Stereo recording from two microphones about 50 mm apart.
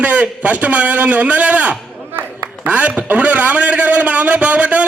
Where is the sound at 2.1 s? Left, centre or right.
Right.